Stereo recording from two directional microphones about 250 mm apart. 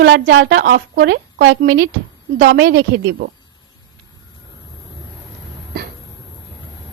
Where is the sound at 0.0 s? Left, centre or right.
Right.